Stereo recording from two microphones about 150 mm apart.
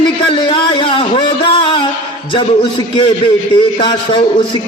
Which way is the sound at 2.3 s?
35° left (ahead or behind).